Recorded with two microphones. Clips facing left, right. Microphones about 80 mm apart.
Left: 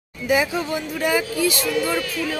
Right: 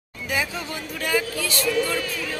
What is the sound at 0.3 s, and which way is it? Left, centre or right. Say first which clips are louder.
Speech: left 7 dB; centre.